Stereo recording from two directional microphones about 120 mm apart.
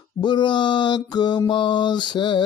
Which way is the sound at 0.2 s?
40° left (ahead or behind).